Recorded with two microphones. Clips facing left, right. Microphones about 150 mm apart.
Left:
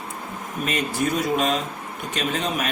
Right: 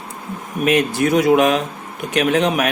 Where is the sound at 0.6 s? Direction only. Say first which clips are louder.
Right 8 dB; 70° right (ahead or behind).